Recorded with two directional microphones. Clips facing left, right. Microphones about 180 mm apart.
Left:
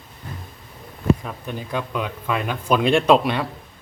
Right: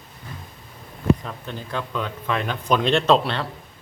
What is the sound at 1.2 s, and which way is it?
Speech, 10° left (ahead or behind).